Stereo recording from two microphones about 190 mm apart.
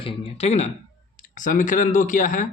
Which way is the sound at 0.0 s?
30° left (ahead or behind).